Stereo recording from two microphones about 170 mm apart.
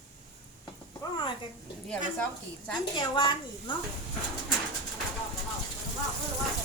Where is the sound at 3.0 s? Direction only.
25° left (ahead or behind).